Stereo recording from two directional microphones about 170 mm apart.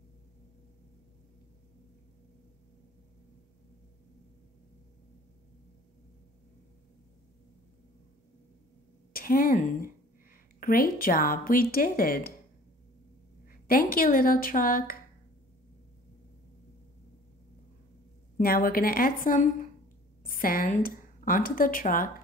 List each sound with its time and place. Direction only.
9.1 s a woman's voice: 60° left (ahead or behind)
13.5 s speech: 60° left (ahead or behind)
18.4 s a woman's voice: 60° left (ahead or behind)